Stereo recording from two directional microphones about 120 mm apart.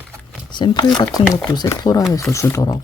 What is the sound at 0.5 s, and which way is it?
Speech, 40° left (ahead or behind).